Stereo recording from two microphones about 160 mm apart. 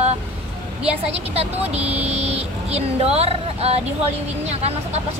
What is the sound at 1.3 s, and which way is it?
Speech, 40° right (ahead or behind).